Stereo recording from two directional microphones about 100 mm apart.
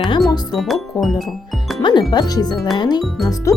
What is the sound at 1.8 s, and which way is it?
Speech, 50° left (ahead or behind).